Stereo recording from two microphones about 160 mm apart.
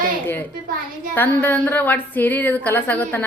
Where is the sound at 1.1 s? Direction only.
10° left (ahead or behind).